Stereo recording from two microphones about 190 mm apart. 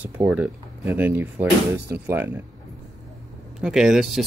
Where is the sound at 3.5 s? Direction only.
5° right (ahead or behind).